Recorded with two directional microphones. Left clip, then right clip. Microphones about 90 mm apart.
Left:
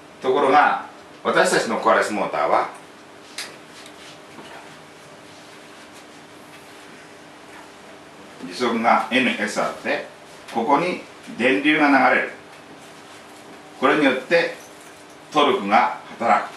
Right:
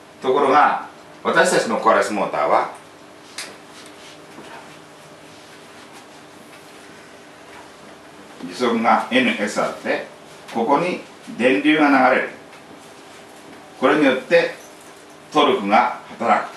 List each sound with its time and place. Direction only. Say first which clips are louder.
0.2 s a man's voice: right 1 dB; 5° left (ahead or behind)
8.5 s speech: right 1 dB; 15° left (ahead or behind)
13.7 s speech: right 2 dB; 15° left (ahead or behind)